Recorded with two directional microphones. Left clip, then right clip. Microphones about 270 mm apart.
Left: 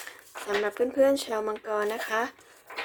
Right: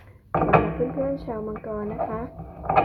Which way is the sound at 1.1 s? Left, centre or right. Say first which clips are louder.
Left 2 dB; centre.